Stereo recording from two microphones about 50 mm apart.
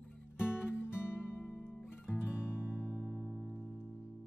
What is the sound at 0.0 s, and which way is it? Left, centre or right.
Music, left.